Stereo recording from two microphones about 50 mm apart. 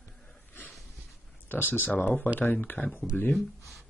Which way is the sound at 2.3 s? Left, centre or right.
Left.